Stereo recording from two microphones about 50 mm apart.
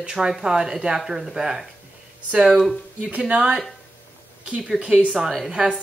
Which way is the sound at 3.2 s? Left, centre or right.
Centre.